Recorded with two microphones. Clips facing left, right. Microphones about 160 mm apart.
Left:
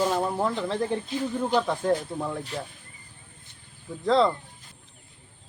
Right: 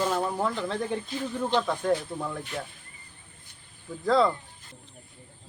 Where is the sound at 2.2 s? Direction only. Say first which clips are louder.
Left 3 dB; 30° left (ahead or behind).